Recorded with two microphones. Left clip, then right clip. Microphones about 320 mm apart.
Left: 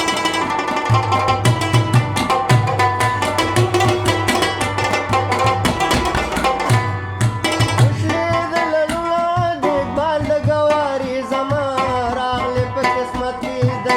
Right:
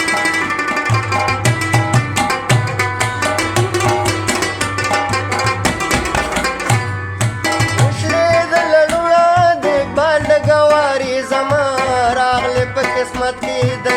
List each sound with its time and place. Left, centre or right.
8.7 s music: right
11.9 s music: right